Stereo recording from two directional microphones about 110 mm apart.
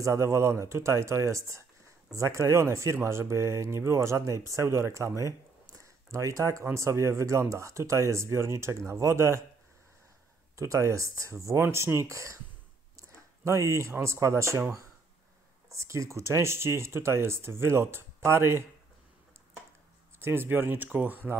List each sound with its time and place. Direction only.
0.0 s speech: 25° right (ahead or behind)
10.5 s speech: 30° right (ahead or behind)
15.7 s speech: 30° right (ahead or behind)
20.2 s speech: 20° right (ahead or behind)